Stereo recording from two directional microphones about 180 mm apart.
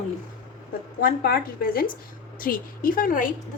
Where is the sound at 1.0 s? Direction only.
60° left (ahead or behind).